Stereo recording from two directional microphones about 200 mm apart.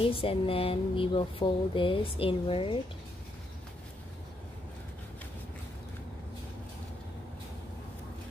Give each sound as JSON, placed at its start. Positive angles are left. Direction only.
{"t": 0.0, "sound": "speech", "side_deg": 25}